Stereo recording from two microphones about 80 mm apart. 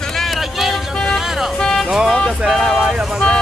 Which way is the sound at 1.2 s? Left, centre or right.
Centre.